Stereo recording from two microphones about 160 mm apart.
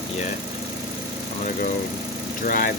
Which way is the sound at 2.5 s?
60° left (ahead or behind).